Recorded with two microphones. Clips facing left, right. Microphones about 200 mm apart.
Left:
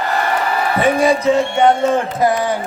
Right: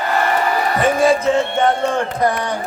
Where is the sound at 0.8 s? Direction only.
Centre (ahead or behind).